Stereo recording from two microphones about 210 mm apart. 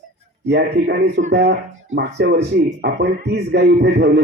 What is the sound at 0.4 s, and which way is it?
A man's voice, 55° right (ahead or behind).